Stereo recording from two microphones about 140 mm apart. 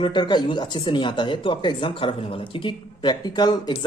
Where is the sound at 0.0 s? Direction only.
35° left (ahead or behind).